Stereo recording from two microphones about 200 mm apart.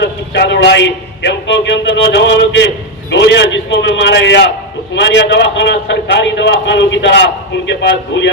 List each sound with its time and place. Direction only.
0.0 s a man's voice: 60° left (ahead or behind)